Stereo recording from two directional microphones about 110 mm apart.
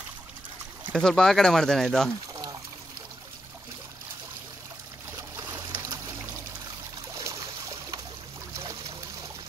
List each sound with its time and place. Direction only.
0.9 s speech: 5° left (ahead or behind)
5.1 s boat: 20° right (ahead or behind)
5.7 s trickle: 25° right (ahead or behind)
7.2 s a sound: 30° right (ahead or behind)